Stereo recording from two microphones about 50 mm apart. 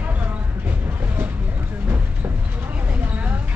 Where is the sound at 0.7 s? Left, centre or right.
Right.